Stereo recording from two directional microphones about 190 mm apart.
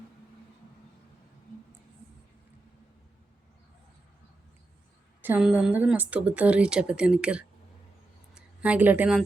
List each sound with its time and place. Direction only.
5.2 s a woman's voice: 10° right (ahead or behind)